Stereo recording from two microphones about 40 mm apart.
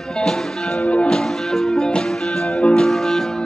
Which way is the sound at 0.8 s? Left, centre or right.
Left.